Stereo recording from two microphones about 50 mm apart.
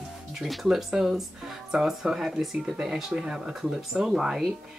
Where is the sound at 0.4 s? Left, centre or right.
Centre.